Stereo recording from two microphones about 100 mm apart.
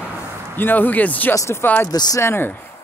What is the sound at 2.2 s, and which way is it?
Speech, 20° left (ahead or behind).